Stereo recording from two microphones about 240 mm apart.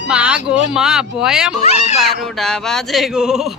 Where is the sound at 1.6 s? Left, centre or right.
Left.